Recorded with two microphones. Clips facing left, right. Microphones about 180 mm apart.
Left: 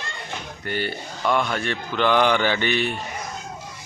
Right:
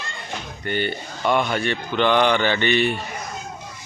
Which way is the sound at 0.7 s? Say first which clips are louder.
Right 3 dB; 5° left (ahead or behind).